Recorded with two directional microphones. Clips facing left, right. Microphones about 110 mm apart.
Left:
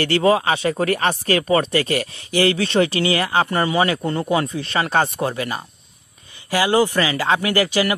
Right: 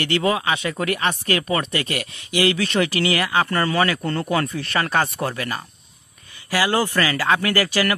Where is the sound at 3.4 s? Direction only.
20° left (ahead or behind).